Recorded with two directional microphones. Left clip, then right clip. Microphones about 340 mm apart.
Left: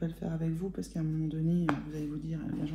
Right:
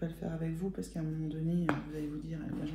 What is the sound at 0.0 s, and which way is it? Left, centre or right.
Speech, centre.